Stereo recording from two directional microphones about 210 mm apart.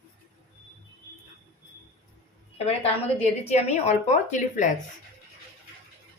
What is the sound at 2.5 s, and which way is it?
A woman's voice, 30° left (ahead or behind).